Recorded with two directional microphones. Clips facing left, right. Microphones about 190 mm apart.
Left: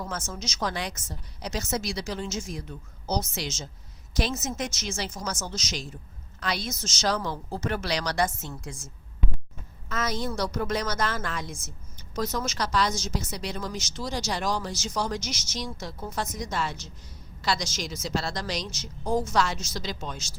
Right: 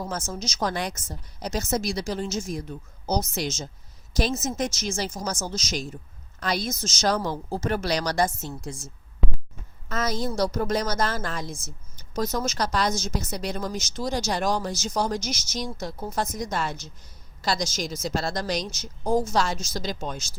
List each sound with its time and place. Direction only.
0.0 s a woman's voice: 35° right (ahead or behind)
9.9 s a woman's voice: 40° right (ahead or behind)